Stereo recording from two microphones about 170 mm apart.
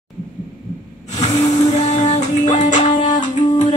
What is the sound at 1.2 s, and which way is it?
Music, 40° left (ahead or behind).